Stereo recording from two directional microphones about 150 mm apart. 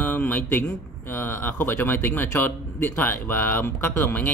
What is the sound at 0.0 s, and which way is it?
A man's voice, 10° left (ahead or behind).